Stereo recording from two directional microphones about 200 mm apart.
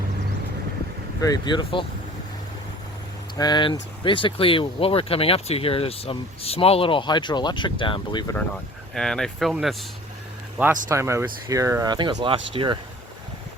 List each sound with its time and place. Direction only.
1.2 s speech: 20° left (ahead or behind)
3.3 s speech: 20° left (ahead or behind)
9.0 s speech: 5° left (ahead or behind)
10.8 s speech: 15° right (ahead or behind)